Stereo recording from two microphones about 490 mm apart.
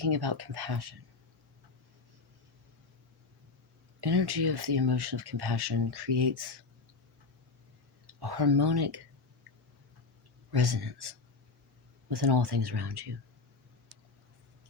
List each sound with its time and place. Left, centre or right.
0.0 s speech: right
4.0 s speech: right
8.0 s speech: right
10.5 s speech: right